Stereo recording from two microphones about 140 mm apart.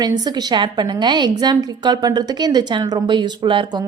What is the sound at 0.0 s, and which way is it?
A woman's voice, 30° right (ahead or behind).